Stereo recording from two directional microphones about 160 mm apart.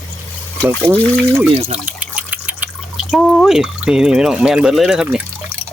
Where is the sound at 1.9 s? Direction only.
10° right (ahead or behind).